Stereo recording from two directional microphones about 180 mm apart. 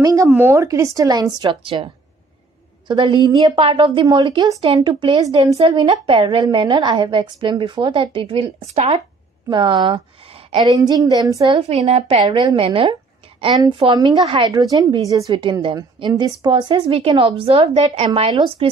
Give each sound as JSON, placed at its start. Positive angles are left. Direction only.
{"t": 0.0, "sound": "a woman's voice", "side_deg": -20}
{"t": 2.9, "sound": "a woman's voice", "side_deg": -25}
{"t": 9.5, "sound": "a woman's voice", "side_deg": -25}
{"t": 11.5, "sound": "a woman's voice", "side_deg": -40}